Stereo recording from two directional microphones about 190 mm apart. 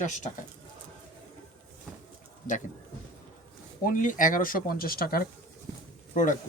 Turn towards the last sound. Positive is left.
turn(degrees=40)  # may be behind; listen again after turning